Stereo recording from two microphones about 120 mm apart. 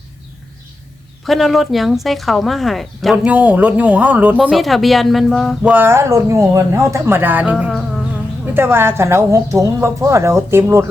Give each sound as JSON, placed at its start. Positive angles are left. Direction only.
{"t": 1.2, "sound": "speech", "side_deg": 0}
{"t": 3.2, "sound": "speech", "side_deg": -10}
{"t": 4.5, "sound": "speech", "side_deg": 0}
{"t": 5.7, "sound": "speech", "side_deg": -20}
{"t": 7.5, "sound": "speech", "side_deg": 0}
{"t": 8.5, "sound": "speech", "side_deg": -20}